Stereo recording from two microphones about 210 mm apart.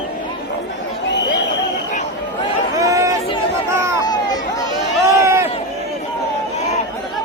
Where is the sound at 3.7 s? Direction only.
15° right (ahead or behind).